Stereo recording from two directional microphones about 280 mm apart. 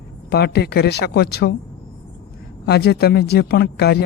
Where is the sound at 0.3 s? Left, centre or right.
Left.